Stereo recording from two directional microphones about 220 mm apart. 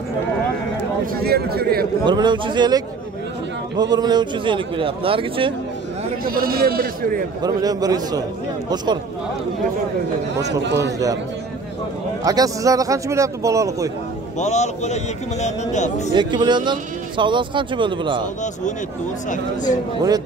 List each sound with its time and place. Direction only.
1.1 s a man's voice: 45° right (ahead or behind)
2.0 s a man's voice: 20° right (ahead or behind)
6.2 s speech: 40° right (ahead or behind)
7.4 s a man's voice: 15° right (ahead or behind)
10.3 s a man's voice: 50° right (ahead or behind)
12.3 s speech: 15° right (ahead or behind)
14.4 s speech: 30° left (ahead or behind)
16.1 s a man's voice: 20° right (ahead or behind)